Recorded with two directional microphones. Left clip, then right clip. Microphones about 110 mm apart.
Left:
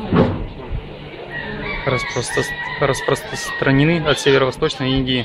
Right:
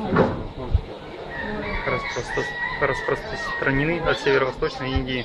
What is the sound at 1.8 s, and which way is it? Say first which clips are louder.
Speech: left 6 dB; 30° left (ahead or behind).